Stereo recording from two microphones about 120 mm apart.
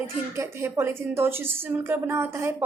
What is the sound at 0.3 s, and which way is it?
A woman's voice, 20° right (ahead or behind).